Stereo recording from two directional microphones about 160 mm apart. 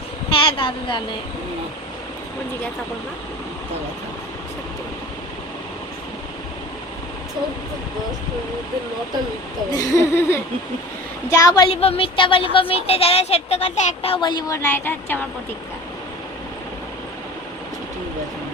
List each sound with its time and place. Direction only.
0.3 s a sound: 35° left (ahead or behind)
9.7 s speech: 20° left (ahead or behind)
11.7 s speech: 40° left (ahead or behind); by 15.2 s 15° left (ahead or behind)